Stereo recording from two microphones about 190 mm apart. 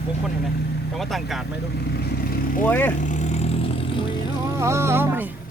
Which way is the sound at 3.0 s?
35° left (ahead or behind).